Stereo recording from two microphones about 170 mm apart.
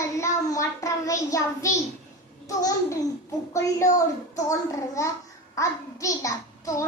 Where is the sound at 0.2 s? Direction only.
20° left (ahead or behind).